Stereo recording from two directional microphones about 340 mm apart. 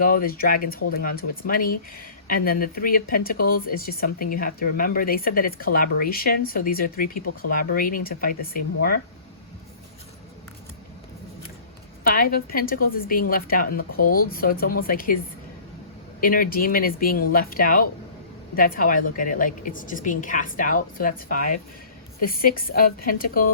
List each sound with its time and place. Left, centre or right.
0.0 s speech: left
12.0 s speech: left
16.2 s speech: left